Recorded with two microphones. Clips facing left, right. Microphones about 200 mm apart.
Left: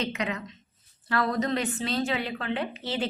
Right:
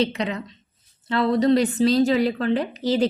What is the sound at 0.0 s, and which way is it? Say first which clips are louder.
A woman's voice: right 7 dB; 35° right (ahead or behind).